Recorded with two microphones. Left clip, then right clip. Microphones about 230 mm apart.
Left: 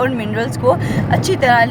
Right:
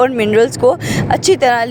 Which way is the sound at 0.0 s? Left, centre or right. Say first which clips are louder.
Right 7 dB; right.